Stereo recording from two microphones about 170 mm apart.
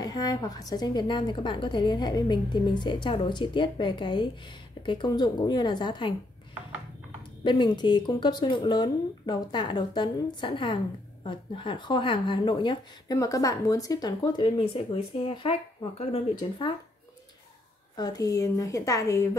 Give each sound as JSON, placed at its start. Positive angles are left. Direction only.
{"t": 0.0, "sound": "speech", "side_deg": 25}
{"t": 7.4, "sound": "speech", "side_deg": 25}
{"t": 17.9, "sound": "speech", "side_deg": 20}